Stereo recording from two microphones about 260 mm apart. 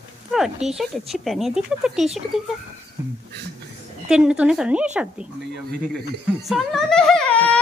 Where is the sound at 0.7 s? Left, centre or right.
Centre.